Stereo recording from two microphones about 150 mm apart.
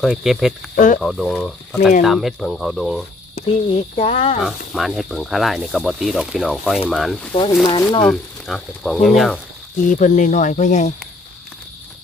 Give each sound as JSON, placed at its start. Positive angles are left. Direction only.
{"t": 0.0, "sound": "speech", "side_deg": 0}
{"t": 3.3, "sound": "speech", "side_deg": 45}
{"t": 4.4, "sound": "speech", "side_deg": 0}
{"t": 7.6, "sound": "speech", "side_deg": 35}
{"t": 8.1, "sound": "speech", "side_deg": 0}
{"t": 9.8, "sound": "speech", "side_deg": 60}